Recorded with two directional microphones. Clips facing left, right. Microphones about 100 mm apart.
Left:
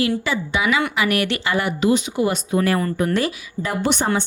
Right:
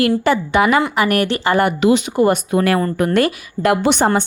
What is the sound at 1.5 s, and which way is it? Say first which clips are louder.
Speech: right 8 dB; 50° right (ahead or behind).